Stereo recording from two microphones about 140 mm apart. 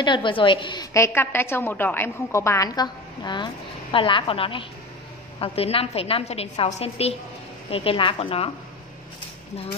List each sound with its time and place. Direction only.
0.0 s a woman's voice: 35° left (ahead or behind)
0.9 s a woman's voice: 20° left (ahead or behind); by 8.5 s 45° left (ahead or behind)